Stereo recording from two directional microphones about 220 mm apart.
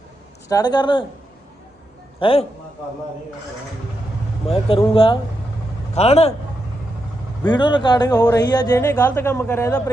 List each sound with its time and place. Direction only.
0.4 s speech: 15° left (ahead or behind)
2.1 s a man's voice: 25° left (ahead or behind)
4.4 s speech: 25° left (ahead or behind)
7.4 s speech: 20° left (ahead or behind)